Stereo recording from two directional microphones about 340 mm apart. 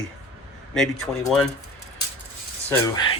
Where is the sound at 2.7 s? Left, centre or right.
Centre.